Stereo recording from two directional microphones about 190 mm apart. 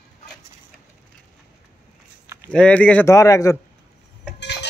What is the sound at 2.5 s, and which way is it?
Speech, 5° left (ahead or behind).